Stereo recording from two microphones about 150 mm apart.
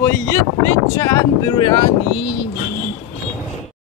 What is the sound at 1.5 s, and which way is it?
Speech, 30° left (ahead or behind).